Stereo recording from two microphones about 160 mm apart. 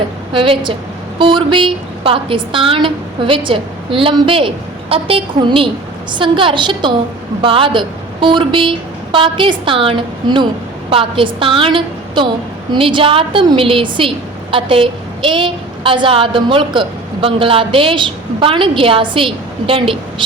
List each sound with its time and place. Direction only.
0.3 s a woman's voice: 30° right (ahead or behind)